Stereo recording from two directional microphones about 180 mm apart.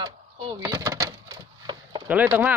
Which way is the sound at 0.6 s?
15° right (ahead or behind).